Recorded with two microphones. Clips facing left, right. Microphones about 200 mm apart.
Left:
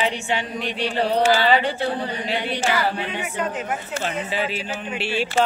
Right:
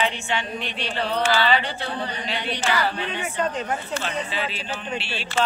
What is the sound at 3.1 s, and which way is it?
A woman's voice, 10° left (ahead or behind).